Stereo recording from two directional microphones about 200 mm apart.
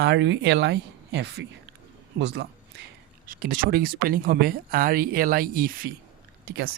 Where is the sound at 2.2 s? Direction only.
60° right (ahead or behind).